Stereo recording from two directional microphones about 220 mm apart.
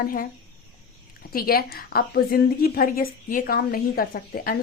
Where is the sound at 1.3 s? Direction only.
45° left (ahead or behind).